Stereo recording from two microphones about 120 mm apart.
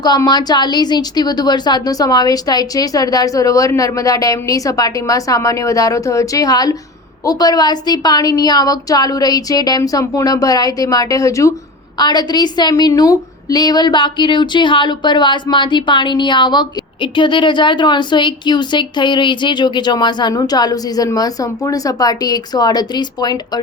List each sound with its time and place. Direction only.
0.3 s a woman's voice: 35° left (ahead or behind)